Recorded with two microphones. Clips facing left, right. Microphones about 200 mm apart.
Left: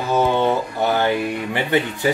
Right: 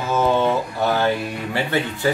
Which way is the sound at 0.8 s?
15° left (ahead or behind).